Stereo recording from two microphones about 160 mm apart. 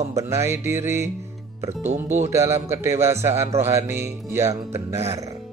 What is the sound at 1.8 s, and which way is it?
Speech, 45° right (ahead or behind).